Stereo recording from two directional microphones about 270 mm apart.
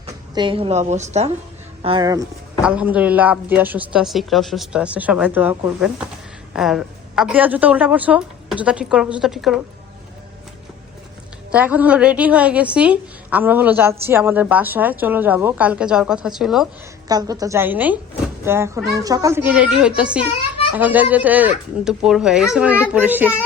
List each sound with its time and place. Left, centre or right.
0.0 s a woman's voice: centre
11.5 s a woman's voice: centre
17.1 s a woman's voice: centre